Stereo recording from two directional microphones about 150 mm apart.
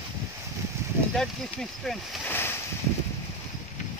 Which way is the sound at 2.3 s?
15° left (ahead or behind).